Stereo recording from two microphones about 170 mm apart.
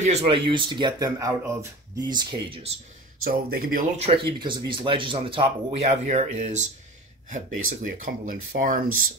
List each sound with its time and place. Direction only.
0.0 s speech: 35° right (ahead or behind)
3.3 s speech: 60° right (ahead or behind)
4.3 s speech: 30° right (ahead or behind); by 9.1 s 55° right (ahead or behind)